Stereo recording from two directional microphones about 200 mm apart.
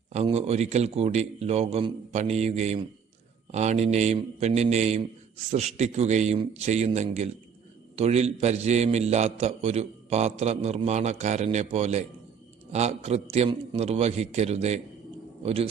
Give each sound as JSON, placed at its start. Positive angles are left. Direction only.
{"t": 0.1, "sound": "a man's voice", "side_deg": -30}